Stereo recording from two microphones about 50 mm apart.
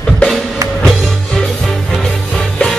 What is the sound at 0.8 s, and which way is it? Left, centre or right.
Music, centre.